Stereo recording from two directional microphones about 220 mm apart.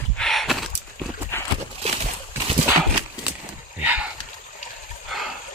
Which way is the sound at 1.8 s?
30° right (ahead or behind).